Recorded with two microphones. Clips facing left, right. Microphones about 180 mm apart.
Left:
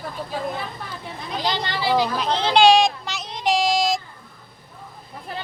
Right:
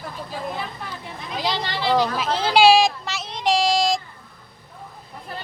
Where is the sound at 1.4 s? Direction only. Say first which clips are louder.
Even; centre (ahead or behind).